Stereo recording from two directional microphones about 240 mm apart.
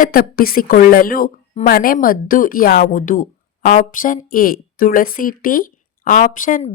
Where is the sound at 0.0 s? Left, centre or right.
Left.